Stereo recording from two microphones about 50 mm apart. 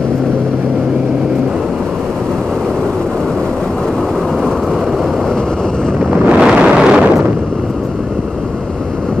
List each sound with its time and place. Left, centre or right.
6.0 s wind noise: right